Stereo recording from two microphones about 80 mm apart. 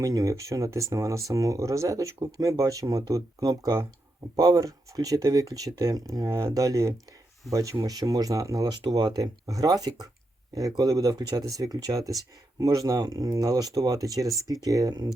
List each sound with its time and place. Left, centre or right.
0.0 s speech: right
8.8 s speech: right